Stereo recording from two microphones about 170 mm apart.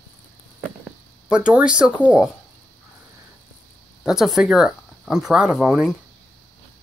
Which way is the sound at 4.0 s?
Centre (ahead or behind).